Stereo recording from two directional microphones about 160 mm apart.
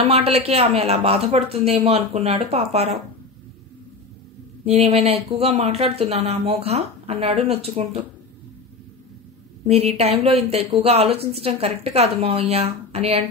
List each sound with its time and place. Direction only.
0.0 s speech: 40° right (ahead or behind)
4.6 s speech: 40° right (ahead or behind)
9.7 s speech: 40° right (ahead or behind)